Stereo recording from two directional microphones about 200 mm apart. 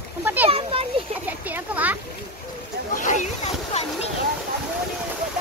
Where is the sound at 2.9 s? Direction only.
40° left (ahead or behind).